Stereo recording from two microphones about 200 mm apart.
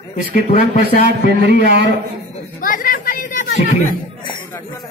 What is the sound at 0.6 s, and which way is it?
A man's voice, 55° right (ahead or behind).